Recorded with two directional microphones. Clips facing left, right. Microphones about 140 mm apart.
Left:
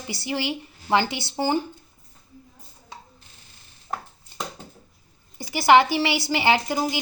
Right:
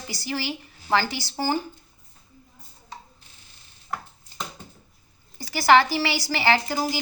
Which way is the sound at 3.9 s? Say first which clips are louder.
Left 1 dB; 30° left (ahead or behind).